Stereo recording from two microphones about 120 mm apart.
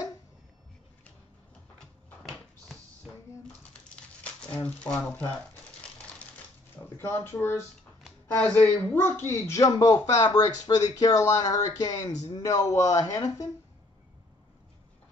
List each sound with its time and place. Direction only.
3.9 s a sound: 10° left (ahead or behind)
4.6 s speech: 10° left (ahead or behind)
7.0 s speech: 20° left (ahead or behind)